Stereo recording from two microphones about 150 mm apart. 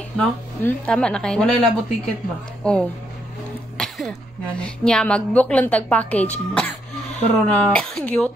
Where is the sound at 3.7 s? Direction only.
5° left (ahead or behind).